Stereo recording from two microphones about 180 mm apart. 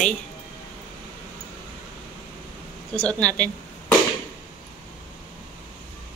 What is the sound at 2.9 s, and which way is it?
Speech, 5° left (ahead or behind).